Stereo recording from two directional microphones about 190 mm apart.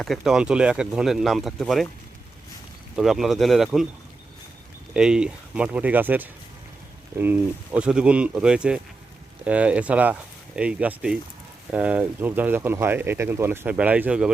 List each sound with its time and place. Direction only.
0.0 s speech: centre (ahead or behind)
2.9 s speech: centre (ahead or behind)
4.9 s speech: 5° right (ahead or behind)
7.8 s speech: 5° right (ahead or behind)